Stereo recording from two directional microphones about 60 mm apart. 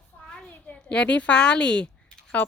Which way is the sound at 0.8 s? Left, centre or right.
Centre.